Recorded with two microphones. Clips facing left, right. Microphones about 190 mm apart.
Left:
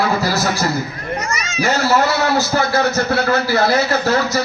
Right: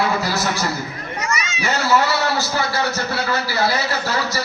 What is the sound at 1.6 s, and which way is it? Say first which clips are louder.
A man's voice: left 3 dB; 45° left (ahead or behind).